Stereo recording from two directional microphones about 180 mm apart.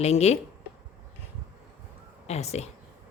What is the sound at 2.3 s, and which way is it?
Speech, 35° left (ahead or behind).